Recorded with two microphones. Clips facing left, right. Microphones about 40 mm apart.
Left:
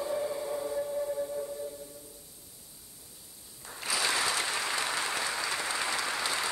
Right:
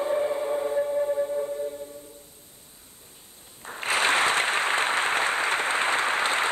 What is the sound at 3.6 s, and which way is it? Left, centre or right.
Applause, right.